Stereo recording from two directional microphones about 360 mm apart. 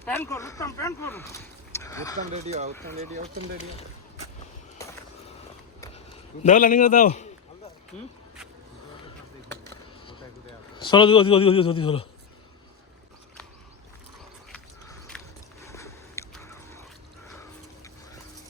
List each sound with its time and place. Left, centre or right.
0.0 s speech: centre
1.8 s horse: centre
2.3 s speech: centre
6.4 s a man's voice: left
10.8 s speech: centre
14.5 s a sound: centre